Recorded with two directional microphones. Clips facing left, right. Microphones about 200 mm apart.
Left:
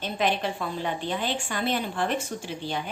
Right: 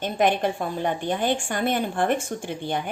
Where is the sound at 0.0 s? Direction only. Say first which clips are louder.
Right 5 dB; 50° right (ahead or behind).